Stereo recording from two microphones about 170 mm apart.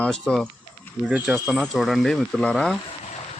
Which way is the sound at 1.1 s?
10° right (ahead or behind).